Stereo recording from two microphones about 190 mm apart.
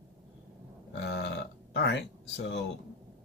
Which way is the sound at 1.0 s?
65° left (ahead or behind).